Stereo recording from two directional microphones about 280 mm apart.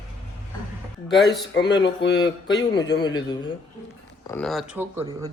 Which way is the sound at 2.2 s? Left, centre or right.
Centre.